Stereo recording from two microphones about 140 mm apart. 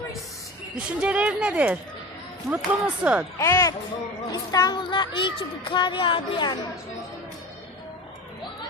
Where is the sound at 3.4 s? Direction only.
20° left (ahead or behind); by 6.5 s 35° left (ahead or behind).